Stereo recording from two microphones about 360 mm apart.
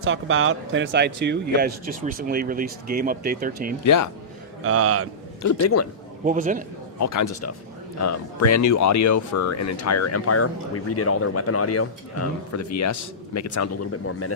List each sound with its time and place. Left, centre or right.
0.0 s speech: right
3.8 s speech: left
4.6 s a man's voice: right
5.4 s speech: left
6.2 s speech: right
7.0 s speech: left